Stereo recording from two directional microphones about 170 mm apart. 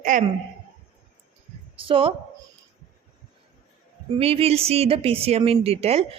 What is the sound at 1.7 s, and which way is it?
Speech, 30° right (ahead or behind).